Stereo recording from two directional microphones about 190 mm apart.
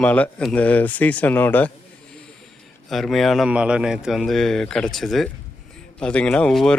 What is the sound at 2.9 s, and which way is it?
Speech, centre (ahead or behind).